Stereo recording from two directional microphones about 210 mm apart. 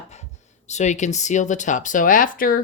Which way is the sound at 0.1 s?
35° left (ahead or behind).